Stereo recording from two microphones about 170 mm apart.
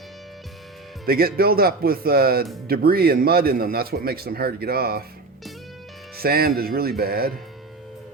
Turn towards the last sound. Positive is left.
turn(degrees=-65)  # may be behind; listen again after turning